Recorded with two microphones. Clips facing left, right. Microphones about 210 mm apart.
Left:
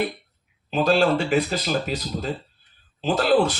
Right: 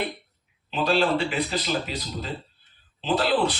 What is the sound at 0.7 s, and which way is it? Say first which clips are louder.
Speech: left 3 dB; 45° left (ahead or behind).